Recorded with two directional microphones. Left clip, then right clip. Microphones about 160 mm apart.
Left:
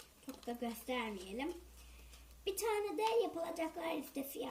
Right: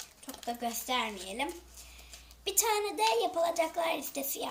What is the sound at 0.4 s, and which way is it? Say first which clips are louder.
A child's voice: right 8 dB; 5° left (ahead or behind).